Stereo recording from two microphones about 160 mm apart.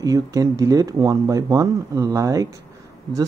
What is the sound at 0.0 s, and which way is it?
Speech, 20° right (ahead or behind).